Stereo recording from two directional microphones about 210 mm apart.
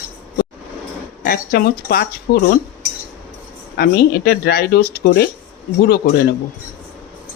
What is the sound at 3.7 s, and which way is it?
Speech, 50° left (ahead or behind).